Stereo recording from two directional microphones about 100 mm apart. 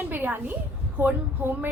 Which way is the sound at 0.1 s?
20° right (ahead or behind).